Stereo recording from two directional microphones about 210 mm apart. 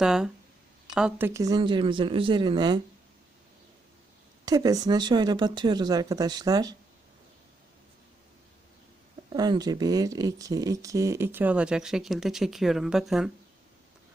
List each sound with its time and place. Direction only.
0.0 s speech: 5° right (ahead or behind); by 2.8 s 20° right (ahead or behind)
4.4 s speech: 15° right (ahead or behind)
9.3 s speech: 20° right (ahead or behind); by 13.3 s centre (ahead or behind)